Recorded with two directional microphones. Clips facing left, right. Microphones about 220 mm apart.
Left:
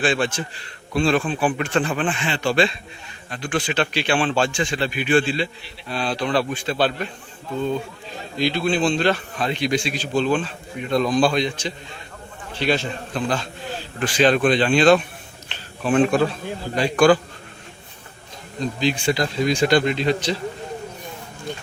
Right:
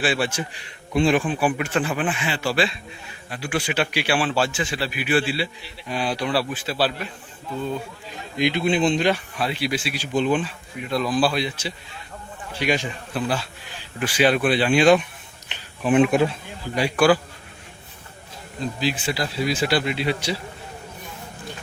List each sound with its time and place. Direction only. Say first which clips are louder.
0.0 s a man's voice: left 2 dB; 10° right (ahead or behind)
8.4 s a man's voice: even; 20° right (ahead or behind)
10.8 s a man's voice: left 3 dB; 5° right (ahead or behind)
18.6 s speech: left 4 dB; 5° right (ahead or behind)